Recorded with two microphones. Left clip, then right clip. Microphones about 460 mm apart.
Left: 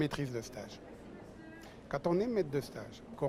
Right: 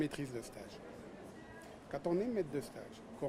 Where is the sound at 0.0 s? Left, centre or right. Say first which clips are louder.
Left 4 dB; left.